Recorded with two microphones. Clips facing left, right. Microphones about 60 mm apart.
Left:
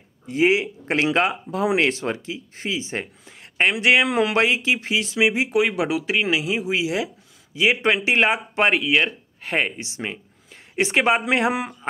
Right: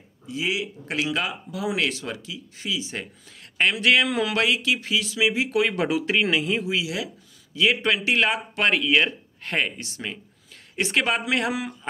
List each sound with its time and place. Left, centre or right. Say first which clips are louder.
0.3 s a man's voice: left 8 dB; left; by 6.6 s centre
6.6 s speech: left 4 dB; left
8.7 s speech: left 1 dB; centre
9.6 s speech: left 2 dB; centre